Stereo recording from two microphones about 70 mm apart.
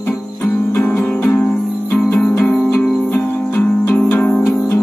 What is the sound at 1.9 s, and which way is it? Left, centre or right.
Music, left.